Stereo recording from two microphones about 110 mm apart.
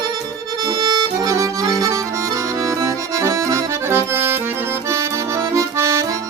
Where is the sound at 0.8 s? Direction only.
40° right (ahead or behind); by 4.4 s 25° right (ahead or behind).